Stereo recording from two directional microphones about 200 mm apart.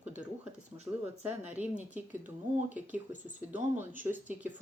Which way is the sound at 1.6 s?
10° right (ahead or behind).